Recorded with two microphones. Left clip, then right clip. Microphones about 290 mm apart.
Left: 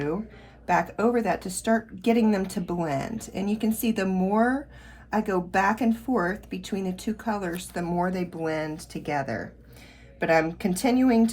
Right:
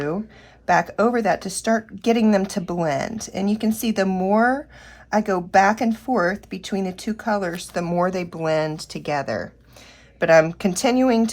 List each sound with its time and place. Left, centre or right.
0.7 s speech: right